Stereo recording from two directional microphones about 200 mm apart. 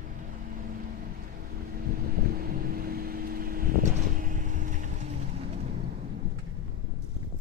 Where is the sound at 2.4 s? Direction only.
45° right (ahead or behind).